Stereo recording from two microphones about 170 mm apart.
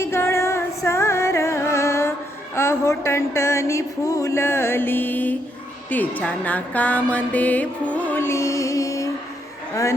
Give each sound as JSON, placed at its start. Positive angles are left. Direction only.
{"t": 0.0, "sound": "music", "side_deg": 15}